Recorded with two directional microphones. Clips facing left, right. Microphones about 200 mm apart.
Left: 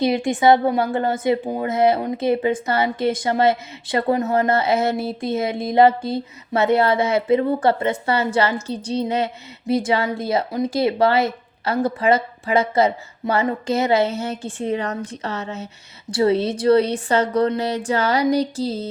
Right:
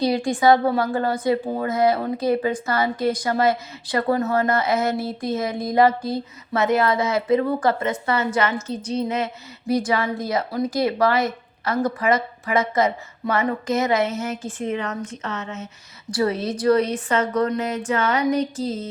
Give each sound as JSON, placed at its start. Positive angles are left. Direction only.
{"t": 0.0, "sound": "a woman's voice", "side_deg": 20}